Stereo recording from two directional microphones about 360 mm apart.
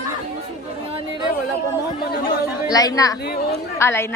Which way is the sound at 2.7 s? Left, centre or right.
Centre.